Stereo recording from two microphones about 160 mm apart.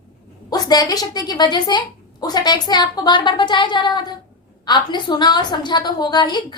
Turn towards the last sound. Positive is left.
turn(degrees=30)  # may be behind; listen again after turning